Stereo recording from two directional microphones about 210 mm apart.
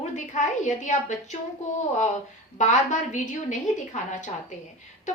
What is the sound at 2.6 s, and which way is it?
Speech, 35° left (ahead or behind).